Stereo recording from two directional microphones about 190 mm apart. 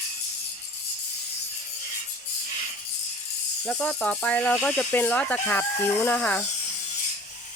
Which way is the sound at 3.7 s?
5° left (ahead or behind).